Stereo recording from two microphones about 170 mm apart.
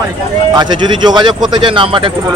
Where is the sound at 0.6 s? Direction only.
25° right (ahead or behind).